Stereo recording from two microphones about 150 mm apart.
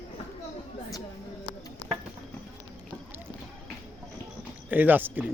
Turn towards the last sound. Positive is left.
turn(degrees=-10)  # may be behind; listen again after turning